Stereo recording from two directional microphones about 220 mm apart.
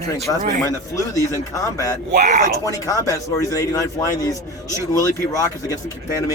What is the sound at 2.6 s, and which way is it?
Speech, 15° left (ahead or behind).